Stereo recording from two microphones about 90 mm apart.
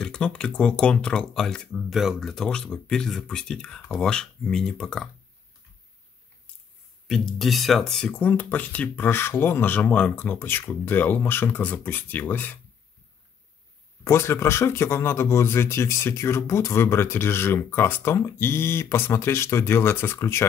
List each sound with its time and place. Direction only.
0.0 s speech: 10° left (ahead or behind)
7.1 s speech: centre (ahead or behind)
8.1 s speech: 20° left (ahead or behind)
14.0 s speech: 30° left (ahead or behind)